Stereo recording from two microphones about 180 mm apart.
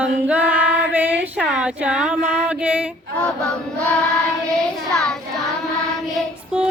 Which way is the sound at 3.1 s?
5° left (ahead or behind).